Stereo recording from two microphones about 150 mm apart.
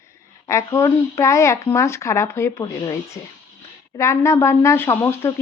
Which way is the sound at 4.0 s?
20° left (ahead or behind).